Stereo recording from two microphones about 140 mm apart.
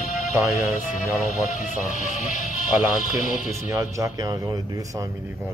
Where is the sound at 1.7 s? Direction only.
65° left (ahead or behind).